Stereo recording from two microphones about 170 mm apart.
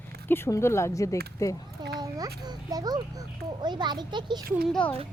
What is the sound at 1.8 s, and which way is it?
A child's voice, 25° right (ahead or behind).